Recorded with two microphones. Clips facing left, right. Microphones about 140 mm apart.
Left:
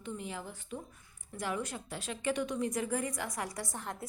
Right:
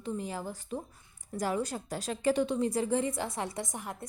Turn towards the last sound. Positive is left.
turn(degrees=-20)  # may be behind; listen again after turning